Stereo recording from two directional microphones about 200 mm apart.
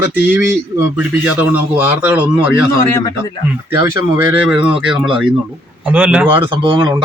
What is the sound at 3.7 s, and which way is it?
A man's voice, 15° right (ahead or behind).